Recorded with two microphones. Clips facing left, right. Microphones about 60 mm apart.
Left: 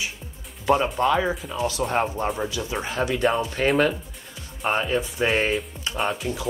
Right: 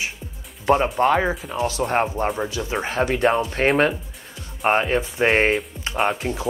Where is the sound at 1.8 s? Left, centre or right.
Right.